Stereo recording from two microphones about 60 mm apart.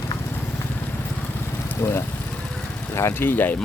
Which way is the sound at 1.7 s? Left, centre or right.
Left.